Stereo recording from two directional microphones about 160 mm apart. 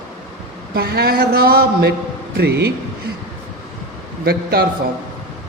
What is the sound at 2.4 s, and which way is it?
Speech, 90° right.